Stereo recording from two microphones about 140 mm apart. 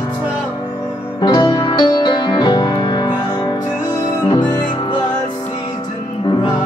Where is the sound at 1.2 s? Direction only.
30° left (ahead or behind).